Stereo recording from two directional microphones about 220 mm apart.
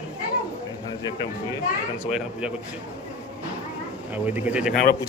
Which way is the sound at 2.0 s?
Centre (ahead or behind).